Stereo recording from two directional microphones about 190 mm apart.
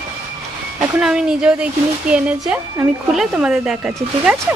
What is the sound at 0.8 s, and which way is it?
A woman's voice, 5° right (ahead or behind).